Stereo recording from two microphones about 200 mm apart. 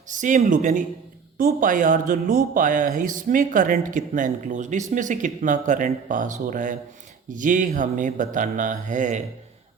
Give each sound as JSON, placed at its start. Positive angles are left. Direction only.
{"t": 0.1, "sound": "speech", "side_deg": -40}